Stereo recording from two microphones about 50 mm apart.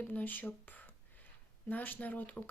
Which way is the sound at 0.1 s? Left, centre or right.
Left.